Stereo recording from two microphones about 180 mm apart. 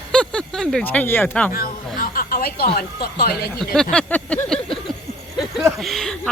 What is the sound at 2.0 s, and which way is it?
Speech, 50° left (ahead or behind).